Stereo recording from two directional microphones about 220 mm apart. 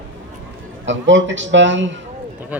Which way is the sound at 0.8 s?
55° right (ahead or behind).